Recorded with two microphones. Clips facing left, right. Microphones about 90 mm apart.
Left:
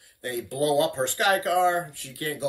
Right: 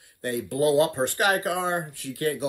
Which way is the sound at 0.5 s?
20° right (ahead or behind).